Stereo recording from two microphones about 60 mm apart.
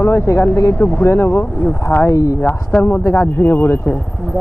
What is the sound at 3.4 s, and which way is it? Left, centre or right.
Speech, left.